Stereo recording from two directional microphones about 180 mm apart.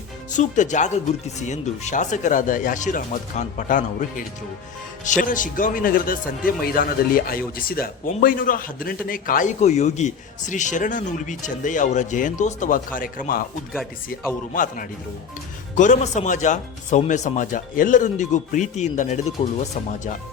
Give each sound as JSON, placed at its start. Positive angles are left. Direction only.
{"t": 0.3, "sound": "a man's voice", "side_deg": 45}
{"t": 14.5, "sound": "a man's voice", "side_deg": 45}